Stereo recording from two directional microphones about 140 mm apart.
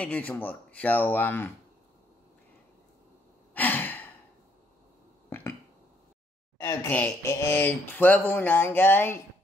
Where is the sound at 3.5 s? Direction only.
10° left (ahead or behind).